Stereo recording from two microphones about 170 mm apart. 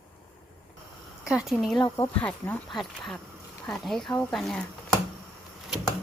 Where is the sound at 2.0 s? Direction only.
10° left (ahead or behind).